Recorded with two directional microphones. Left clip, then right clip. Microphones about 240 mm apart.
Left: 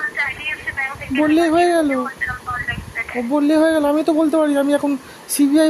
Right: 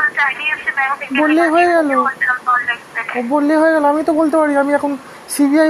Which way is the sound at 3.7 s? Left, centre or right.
Centre.